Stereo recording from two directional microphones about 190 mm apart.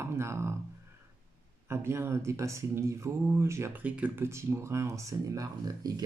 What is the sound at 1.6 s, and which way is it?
Speech, 15° right (ahead or behind).